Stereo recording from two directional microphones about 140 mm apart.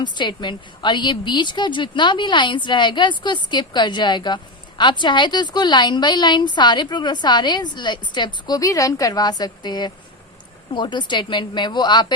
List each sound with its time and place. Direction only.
0.0 s a woman's voice: 35° left (ahead or behind)